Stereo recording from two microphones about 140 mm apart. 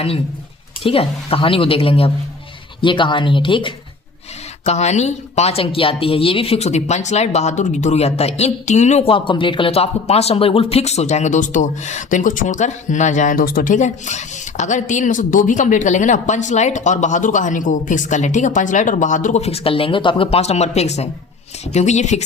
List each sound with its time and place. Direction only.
0.8 s speech: 40° left (ahead or behind)
4.6 s speech: 50° left (ahead or behind)